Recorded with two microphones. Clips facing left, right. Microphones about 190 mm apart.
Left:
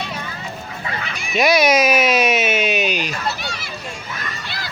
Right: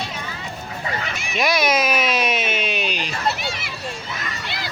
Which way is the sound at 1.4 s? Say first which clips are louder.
Left 5 dB; 5° left (ahead or behind).